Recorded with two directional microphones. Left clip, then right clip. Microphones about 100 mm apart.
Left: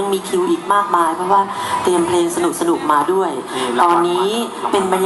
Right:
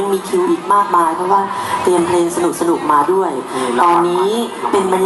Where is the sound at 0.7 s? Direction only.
20° left (ahead or behind).